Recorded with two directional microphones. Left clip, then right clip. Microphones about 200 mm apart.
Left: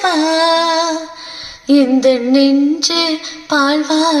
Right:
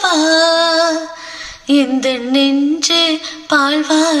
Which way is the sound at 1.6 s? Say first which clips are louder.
Left 3 dB; 30° left (ahead or behind).